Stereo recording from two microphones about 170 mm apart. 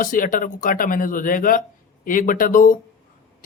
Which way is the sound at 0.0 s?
55° left (ahead or behind).